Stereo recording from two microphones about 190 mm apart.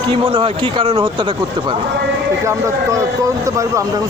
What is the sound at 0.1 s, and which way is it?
Speech, 25° right (ahead or behind).